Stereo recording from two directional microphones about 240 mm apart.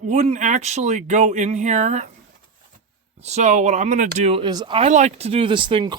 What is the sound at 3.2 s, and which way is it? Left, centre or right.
Speech, right.